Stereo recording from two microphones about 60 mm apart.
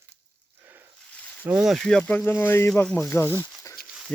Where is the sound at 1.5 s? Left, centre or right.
Right.